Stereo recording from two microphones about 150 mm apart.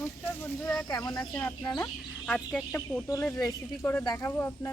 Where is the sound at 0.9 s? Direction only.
25° left (ahead or behind).